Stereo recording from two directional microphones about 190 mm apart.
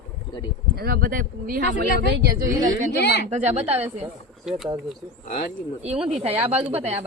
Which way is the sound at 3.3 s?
35° right (ahead or behind).